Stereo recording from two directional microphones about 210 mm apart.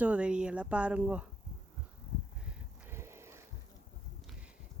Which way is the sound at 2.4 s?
10° right (ahead or behind).